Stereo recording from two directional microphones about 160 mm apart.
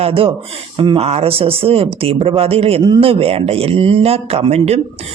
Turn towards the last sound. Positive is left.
turn(degrees=-40)  # may be behind; listen again after turning